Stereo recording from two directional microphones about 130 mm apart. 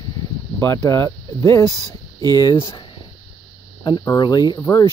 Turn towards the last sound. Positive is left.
turn(degrees=25)  # may be behind; listen again after turning